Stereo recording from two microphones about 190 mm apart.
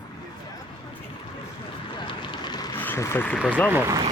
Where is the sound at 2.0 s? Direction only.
25° left (ahead or behind).